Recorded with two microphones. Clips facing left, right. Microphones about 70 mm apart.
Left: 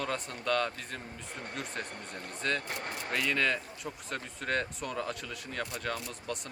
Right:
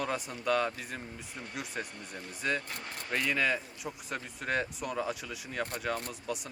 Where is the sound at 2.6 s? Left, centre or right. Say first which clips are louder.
Left 4 dB; left.